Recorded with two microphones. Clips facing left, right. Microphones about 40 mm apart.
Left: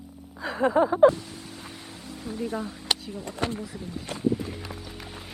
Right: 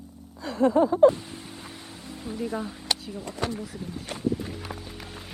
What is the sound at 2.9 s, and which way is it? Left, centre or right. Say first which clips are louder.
Speech: left 2 dB; left.